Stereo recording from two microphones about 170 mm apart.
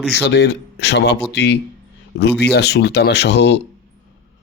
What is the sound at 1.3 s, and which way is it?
Speech, 80° left.